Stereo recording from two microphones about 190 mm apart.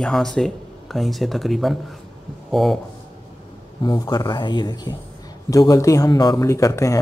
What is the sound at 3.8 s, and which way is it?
Speech, 20° left (ahead or behind).